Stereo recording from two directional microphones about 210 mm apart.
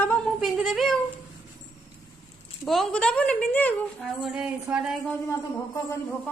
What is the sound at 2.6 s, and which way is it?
Speech, centre (ahead or behind).